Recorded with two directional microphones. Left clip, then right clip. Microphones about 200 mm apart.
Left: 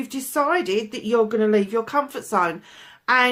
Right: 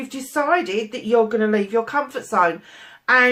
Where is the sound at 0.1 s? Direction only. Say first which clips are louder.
Right 2 dB; 50° left (ahead or behind).